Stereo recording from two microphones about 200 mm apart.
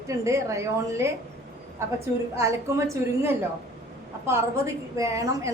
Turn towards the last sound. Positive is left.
turn(degrees=-15)  # may be behind; listen again after turning